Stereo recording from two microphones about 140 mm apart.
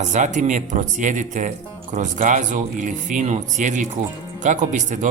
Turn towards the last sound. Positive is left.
turn(degrees=-60)  # may be behind; listen again after turning